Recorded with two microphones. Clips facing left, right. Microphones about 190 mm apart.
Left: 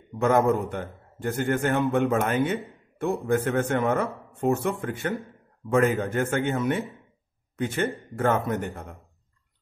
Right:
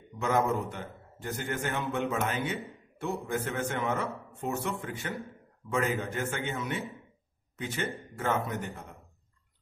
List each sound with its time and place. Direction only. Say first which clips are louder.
0.2 s a man's voice: left 7 dB; 50° left (ahead or behind)